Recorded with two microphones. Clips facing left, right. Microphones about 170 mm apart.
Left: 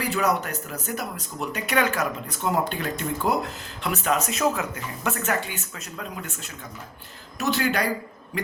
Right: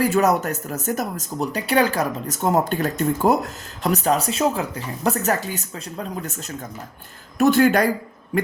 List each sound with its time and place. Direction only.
0.0 s speech: 45° right (ahead or behind)
7.3 s speech: 50° right (ahead or behind)